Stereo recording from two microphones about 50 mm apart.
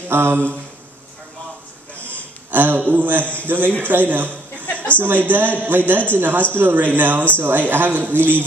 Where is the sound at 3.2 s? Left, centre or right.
Left.